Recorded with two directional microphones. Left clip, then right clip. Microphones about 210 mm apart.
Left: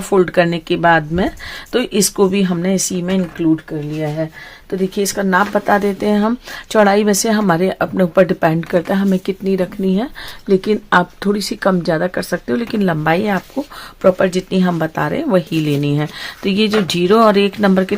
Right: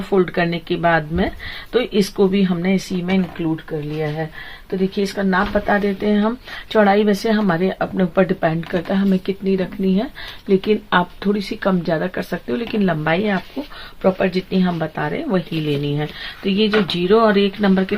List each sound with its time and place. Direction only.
0.1 s speech: 45° left (ahead or behind)
4.9 s speech: 45° left (ahead or behind)